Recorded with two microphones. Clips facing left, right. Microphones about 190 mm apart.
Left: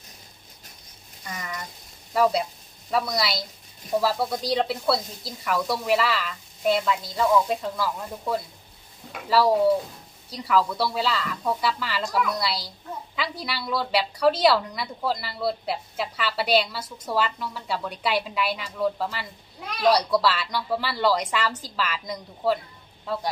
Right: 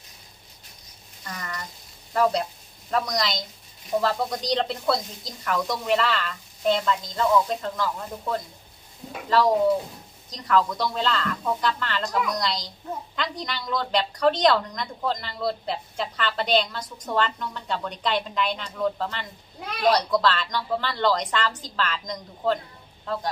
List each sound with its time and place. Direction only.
1.2 s a woman's voice: 5° left (ahead or behind)